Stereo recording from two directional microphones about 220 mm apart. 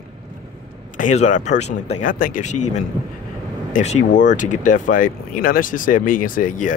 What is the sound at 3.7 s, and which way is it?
Speech, 35° left (ahead or behind).